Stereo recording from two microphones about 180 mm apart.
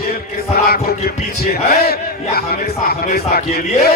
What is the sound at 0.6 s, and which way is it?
Music, 60° left (ahead or behind).